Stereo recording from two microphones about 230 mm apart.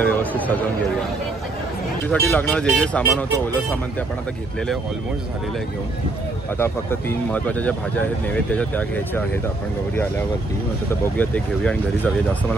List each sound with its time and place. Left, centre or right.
0.0 s a sound: centre
2.0 s speech: centre
6.6 s speech: centre
11.1 s speech: centre